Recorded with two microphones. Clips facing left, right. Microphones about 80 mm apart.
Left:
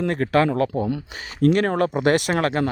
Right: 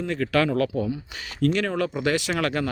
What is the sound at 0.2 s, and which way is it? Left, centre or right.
Speech, left.